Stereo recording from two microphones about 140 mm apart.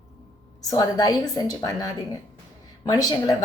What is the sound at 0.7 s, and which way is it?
A woman's voice, 25° left (ahead or behind).